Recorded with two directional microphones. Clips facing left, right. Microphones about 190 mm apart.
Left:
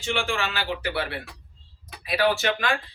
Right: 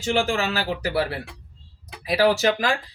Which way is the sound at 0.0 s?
40° right (ahead or behind).